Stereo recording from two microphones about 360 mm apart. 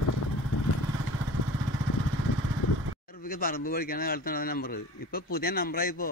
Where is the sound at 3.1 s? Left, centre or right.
Left.